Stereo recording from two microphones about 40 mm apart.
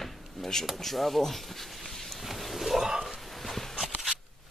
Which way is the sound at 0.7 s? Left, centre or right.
Centre.